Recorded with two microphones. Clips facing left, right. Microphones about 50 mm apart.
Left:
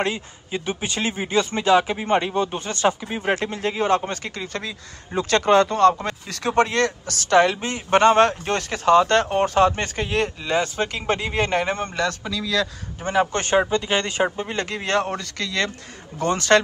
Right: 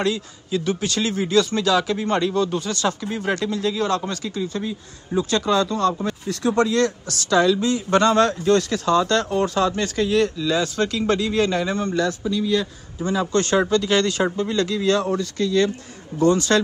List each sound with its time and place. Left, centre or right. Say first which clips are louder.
0.0 s speech: right 2 dB; left
3.4 s speech: even; left
4.4 s speech: right 4 dB; left
11.9 s speech: right 3 dB; left
13.3 s speech: right 1 dB; left